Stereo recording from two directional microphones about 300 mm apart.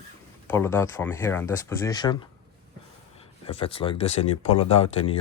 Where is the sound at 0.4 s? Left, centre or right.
Centre.